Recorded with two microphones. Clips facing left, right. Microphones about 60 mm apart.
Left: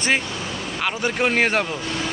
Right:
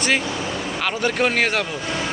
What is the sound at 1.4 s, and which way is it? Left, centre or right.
Speech, left.